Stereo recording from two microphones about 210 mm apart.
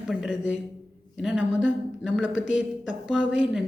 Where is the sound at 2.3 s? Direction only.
65° left (ahead or behind).